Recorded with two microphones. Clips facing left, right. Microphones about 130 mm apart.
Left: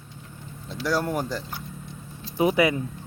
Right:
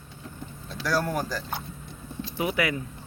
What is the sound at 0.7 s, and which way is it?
Speech, 25° left (ahead or behind).